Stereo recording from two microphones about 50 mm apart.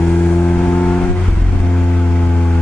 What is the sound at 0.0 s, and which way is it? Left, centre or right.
Vehicle, left.